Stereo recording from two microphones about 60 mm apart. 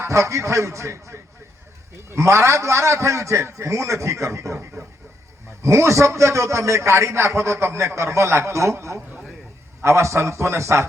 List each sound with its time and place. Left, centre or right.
0.0 s a man's voice: right